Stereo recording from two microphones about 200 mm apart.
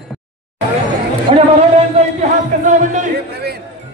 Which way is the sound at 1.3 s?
25° right (ahead or behind).